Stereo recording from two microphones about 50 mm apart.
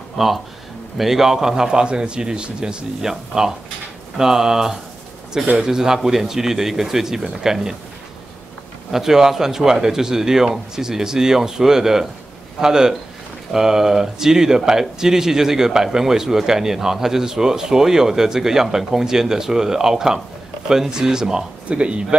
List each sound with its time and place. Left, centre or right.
0.2 s speech: centre
8.9 s speech: centre